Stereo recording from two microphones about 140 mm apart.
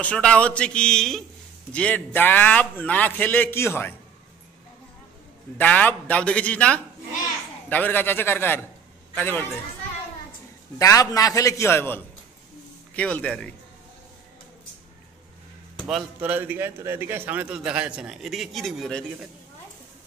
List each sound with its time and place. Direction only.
0.0 s a man's voice: 10° left (ahead or behind)
5.6 s a man's voice: 10° left (ahead or behind)
10.8 s a man's voice: 25° left (ahead or behind); by 13.6 s 5° left (ahead or behind)
15.9 s speech: 5° right (ahead or behind)
16.3 s a man's voice: 15° right (ahead or behind); by 19.0 s 5° left (ahead or behind)